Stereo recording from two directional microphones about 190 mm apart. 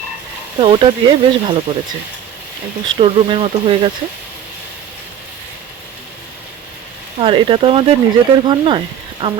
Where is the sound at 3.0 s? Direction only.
30° right (ahead or behind).